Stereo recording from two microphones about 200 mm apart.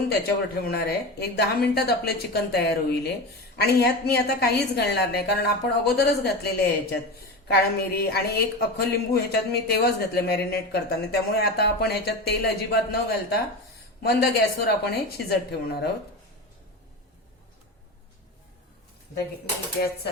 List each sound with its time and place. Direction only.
0.3 s speech: 50° left (ahead or behind)